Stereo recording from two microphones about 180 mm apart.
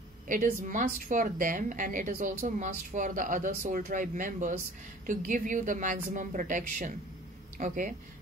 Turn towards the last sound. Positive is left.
turn(degrees=-50)  # may be behind; listen again after turning